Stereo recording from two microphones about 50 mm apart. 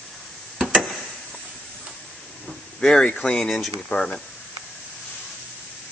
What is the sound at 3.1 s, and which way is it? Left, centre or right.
Speech, centre.